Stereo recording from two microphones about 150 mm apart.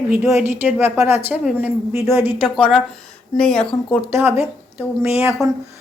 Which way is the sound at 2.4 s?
5° right (ahead or behind).